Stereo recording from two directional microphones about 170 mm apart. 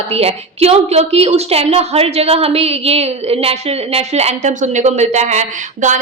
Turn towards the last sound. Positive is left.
turn(degrees=-45)  # may be behind; listen again after turning